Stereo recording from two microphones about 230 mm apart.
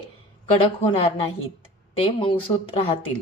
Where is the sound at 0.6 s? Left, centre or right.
Left.